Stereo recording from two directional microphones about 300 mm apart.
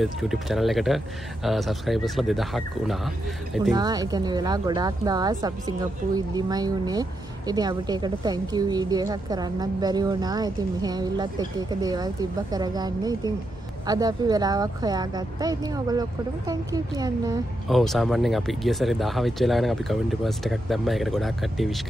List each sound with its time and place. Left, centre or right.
0.0 s speech: centre
3.7 s speech: centre
17.6 s speech: centre